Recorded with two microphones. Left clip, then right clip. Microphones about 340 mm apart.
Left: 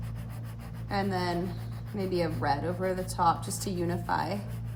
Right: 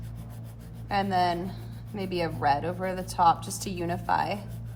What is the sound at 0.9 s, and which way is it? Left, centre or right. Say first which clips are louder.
A woman's voice: right 6 dB; right.